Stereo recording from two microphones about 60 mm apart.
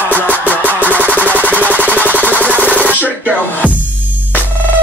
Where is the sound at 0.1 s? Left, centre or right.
Right.